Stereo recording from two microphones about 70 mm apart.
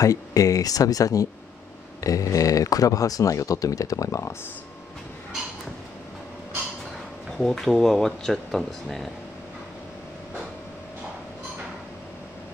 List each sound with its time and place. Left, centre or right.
0.0 s speech: left
7.3 s speech: centre